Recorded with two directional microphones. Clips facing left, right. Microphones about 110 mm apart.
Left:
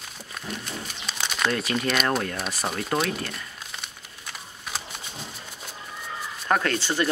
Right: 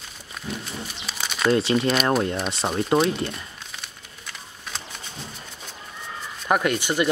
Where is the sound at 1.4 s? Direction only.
25° right (ahead or behind).